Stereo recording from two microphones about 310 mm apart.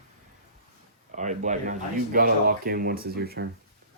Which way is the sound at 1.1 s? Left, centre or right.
Right.